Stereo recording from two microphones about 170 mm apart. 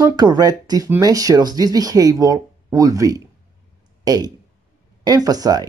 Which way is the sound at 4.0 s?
25° right (ahead or behind).